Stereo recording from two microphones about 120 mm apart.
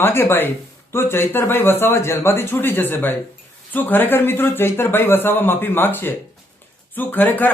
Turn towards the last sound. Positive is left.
turn(degrees=15)  # may be behind; listen again after turning